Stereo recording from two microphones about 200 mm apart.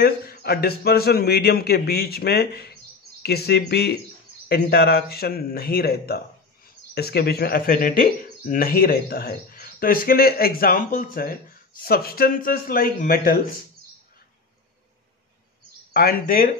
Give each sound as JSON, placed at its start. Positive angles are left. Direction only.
{"t": 0.0, "sound": "speech", "side_deg": 50}
{"t": 15.9, "sound": "speech", "side_deg": 50}